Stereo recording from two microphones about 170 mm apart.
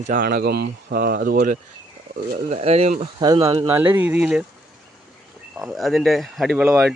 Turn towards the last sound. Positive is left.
turn(degrees=-5)  # may be behind; listen again after turning